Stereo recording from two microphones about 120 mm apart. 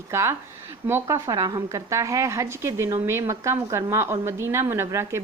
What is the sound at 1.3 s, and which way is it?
A woman's voice, 35° right (ahead or behind).